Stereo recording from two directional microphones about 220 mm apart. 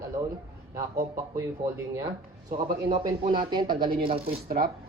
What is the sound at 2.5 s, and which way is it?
Speech, 40° right (ahead or behind).